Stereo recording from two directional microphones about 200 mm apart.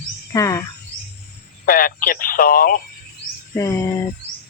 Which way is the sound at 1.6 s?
45° left (ahead or behind).